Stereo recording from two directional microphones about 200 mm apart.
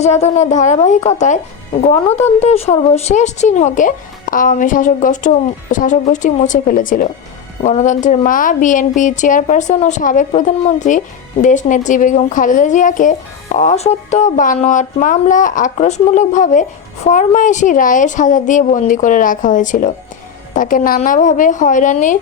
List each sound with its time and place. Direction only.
0.0 s speech: 35° left (ahead or behind)